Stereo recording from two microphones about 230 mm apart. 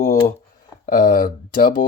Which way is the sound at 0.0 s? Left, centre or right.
Left.